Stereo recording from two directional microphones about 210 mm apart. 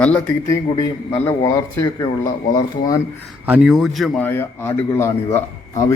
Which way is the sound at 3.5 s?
Centre (ahead or behind).